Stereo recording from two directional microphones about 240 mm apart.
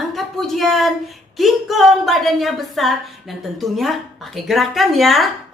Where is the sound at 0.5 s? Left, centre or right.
Centre.